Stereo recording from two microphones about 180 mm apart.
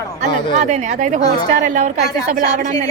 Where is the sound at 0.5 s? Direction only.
40° right (ahead or behind).